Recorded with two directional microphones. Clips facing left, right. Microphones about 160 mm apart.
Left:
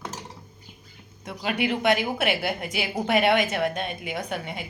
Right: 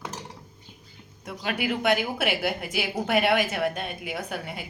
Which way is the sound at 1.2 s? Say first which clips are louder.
Left 2 dB; centre (ahead or behind).